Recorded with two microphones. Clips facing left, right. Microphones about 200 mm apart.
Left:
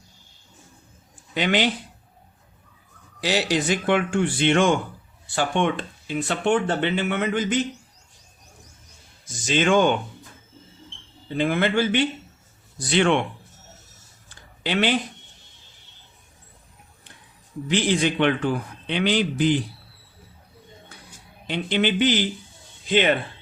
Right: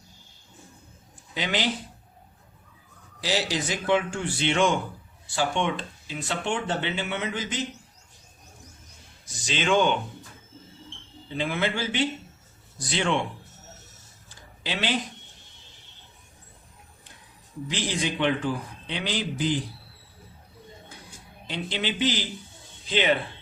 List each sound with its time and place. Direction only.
1.3 s speech: 65° left (ahead or behind)
3.2 s speech: 60° left (ahead or behind)
9.2 s speech: 50° left (ahead or behind)
11.3 s speech: 55° left (ahead or behind)
14.3 s a sound: 60° left (ahead or behind)
17.7 s speech: 65° left (ahead or behind)
21.4 s speech: 60° left (ahead or behind)